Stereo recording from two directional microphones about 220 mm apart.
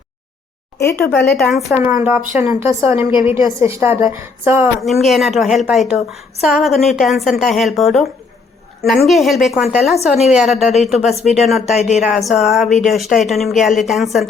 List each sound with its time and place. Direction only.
0.8 s speech: 10° left (ahead or behind)
1.2 s a woman's voice: centre (ahead or behind)
4.8 s a woman's voice: centre (ahead or behind)
9.0 s a woman's voice: centre (ahead or behind)
10.0 s a woman's voice: 30° left (ahead or behind)
10.3 s a woman's voice: centre (ahead or behind)
11.1 s a woman's voice: 30° left (ahead or behind)
11.3 s a woman's voice: centre (ahead or behind)
11.8 s speech: 30° left (ahead or behind)
12.0 s a woman's voice: centre (ahead or behind)